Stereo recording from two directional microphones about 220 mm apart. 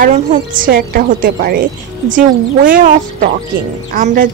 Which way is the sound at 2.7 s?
40° right (ahead or behind).